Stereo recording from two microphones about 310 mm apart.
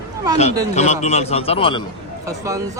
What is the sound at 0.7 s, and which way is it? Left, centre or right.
A man's voice, left.